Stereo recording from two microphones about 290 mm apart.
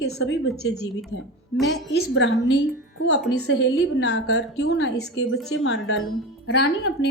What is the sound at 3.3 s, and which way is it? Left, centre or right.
A woman's voice, left.